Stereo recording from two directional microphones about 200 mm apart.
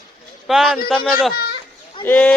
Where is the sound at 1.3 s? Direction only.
50° left (ahead or behind).